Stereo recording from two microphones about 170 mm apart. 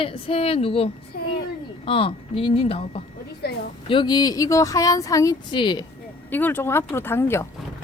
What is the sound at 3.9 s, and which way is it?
Speech, 25° left (ahead or behind).